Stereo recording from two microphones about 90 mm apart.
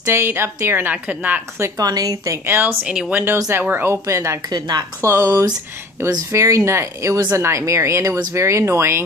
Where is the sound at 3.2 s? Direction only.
30° right (ahead or behind).